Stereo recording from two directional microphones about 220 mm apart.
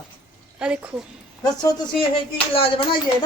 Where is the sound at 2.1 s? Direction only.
25° left (ahead or behind).